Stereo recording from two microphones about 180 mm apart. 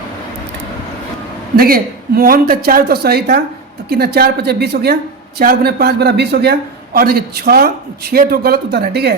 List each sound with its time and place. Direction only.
1.5 s a man's voice: 55° right (ahead or behind)